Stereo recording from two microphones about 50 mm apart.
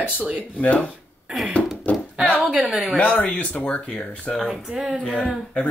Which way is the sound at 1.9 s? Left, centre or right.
Centre.